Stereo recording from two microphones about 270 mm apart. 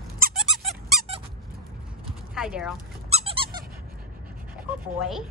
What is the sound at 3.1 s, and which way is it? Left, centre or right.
Squeak, right.